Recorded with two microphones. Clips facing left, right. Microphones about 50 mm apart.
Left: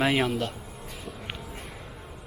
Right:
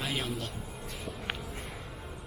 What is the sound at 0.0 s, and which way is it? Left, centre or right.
Speech, left.